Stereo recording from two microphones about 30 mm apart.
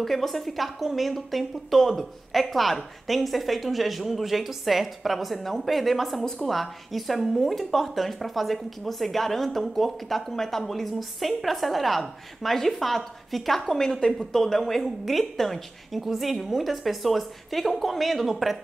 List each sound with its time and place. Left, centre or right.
0.0 s a woman's voice: centre
6.2 s a woman's voice: centre
6.5 s a woman's voice: centre
10.6 s a woman's voice: centre
13.7 s a woman's voice: centre
16.0 s a woman's voice: centre